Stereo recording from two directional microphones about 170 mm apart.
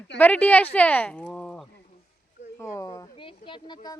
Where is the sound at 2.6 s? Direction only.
15° left (ahead or behind).